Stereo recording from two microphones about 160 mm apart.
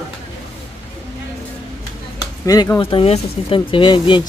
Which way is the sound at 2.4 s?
20° left (ahead or behind).